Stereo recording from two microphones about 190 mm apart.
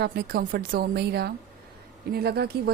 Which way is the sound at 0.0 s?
55° right (ahead or behind).